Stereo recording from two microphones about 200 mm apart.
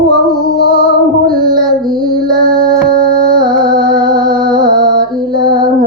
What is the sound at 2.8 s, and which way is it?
Music, 50° right (ahead or behind).